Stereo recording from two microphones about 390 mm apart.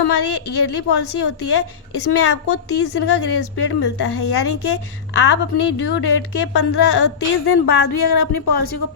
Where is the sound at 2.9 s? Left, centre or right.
Left.